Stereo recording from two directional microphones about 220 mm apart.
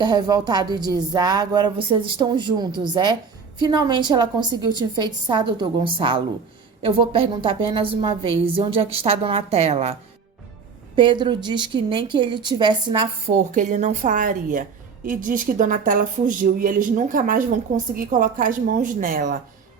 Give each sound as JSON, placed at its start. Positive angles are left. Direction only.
{"t": 0.0, "sound": "a woman's voice", "side_deg": -20}
{"t": 10.9, "sound": "a woman's voice", "side_deg": -20}